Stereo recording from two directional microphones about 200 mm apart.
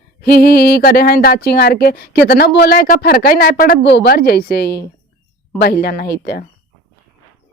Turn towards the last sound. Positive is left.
turn(degrees=50)  # may be behind; listen again after turning